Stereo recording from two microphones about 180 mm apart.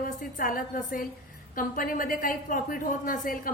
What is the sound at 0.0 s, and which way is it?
A woman's voice, 50° left (ahead or behind).